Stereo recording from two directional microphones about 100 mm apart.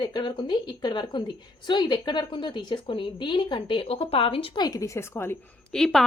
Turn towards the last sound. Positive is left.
turn(degrees=5)  # may be behind; listen again after turning